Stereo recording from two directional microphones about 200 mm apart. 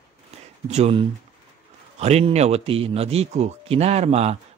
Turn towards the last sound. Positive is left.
turn(degrees=-30)  # may be behind; listen again after turning